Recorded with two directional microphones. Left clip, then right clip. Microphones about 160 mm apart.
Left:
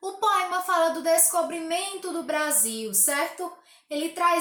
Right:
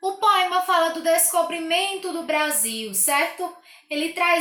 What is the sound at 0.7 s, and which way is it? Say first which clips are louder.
A woman's voice: left 1 dB; 20° left (ahead or behind).